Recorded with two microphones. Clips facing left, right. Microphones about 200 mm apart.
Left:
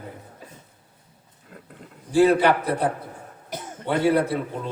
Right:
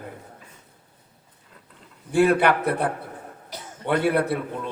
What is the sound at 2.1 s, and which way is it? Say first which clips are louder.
Speech: left 1 dB; 60° right (ahead or behind).